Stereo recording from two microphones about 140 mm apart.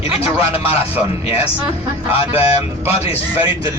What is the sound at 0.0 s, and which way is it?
Speech, 45° left (ahead or behind).